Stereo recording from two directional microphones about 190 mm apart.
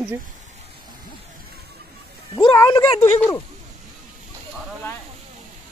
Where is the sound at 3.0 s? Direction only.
10° left (ahead or behind).